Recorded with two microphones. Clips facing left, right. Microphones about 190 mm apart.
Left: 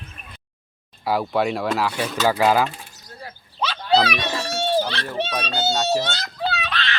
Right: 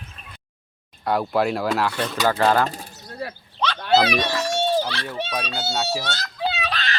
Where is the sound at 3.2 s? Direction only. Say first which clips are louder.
Right 8 dB; 70° right (ahead or behind).